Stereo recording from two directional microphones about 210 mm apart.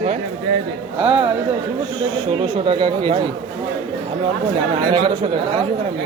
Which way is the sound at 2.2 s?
25° right (ahead or behind).